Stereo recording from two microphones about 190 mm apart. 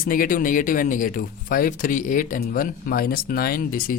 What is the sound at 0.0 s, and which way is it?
Speech, 45° left (ahead or behind).